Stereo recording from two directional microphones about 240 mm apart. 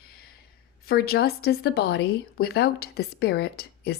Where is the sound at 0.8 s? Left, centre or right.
Left.